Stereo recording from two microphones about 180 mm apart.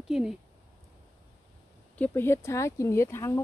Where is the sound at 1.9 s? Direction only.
10° left (ahead or behind).